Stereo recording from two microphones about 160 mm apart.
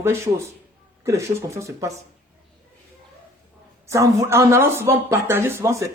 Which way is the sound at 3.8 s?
20° right (ahead or behind).